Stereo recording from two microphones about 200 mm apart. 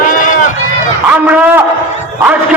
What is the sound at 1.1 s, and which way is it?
A man's voice, 10° right (ahead or behind).